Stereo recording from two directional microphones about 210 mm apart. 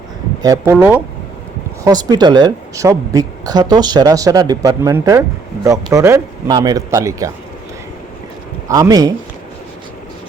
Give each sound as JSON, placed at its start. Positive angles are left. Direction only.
{"t": 0.4, "sound": "speech", "side_deg": -15}
{"t": 1.8, "sound": "speech", "side_deg": -20}
{"t": 8.6, "sound": "speech", "side_deg": -15}